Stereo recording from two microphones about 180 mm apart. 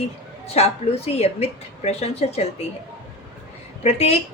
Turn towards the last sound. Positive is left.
turn(degrees=35)  # may be behind; listen again after turning